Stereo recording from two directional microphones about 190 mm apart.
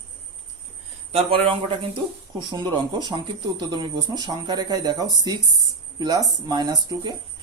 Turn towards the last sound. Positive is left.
turn(degrees=-20)  # may be behind; listen again after turning